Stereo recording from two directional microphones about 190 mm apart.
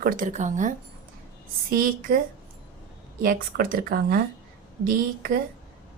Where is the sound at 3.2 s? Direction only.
50° right (ahead or behind).